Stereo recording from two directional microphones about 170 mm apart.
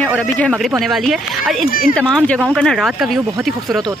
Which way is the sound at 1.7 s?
55° left (ahead or behind).